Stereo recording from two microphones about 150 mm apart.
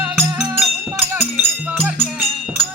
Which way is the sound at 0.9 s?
10° right (ahead or behind).